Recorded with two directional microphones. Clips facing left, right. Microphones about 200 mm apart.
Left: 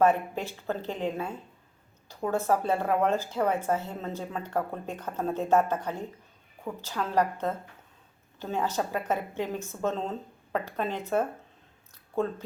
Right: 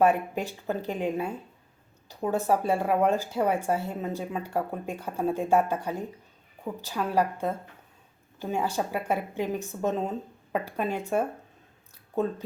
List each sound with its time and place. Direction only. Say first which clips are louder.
0.0 s speech: right 1 dB; 15° right (ahead or behind)